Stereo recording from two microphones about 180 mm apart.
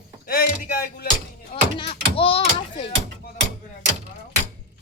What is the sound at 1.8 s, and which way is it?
Speech, 30° left (ahead or behind).